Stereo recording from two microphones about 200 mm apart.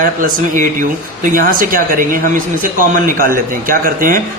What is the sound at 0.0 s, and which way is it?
A man's voice, 45° right (ahead or behind).